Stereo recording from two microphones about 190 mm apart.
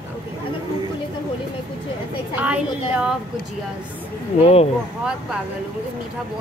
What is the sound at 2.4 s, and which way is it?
Speech, 5° right (ahead or behind).